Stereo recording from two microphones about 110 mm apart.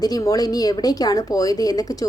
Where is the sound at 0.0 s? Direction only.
35° left (ahead or behind).